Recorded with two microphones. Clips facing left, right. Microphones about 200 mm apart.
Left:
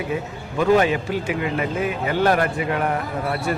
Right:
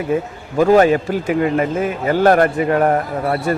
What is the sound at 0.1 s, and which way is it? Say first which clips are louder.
Speech: right 7 dB; 50° right (ahead or behind).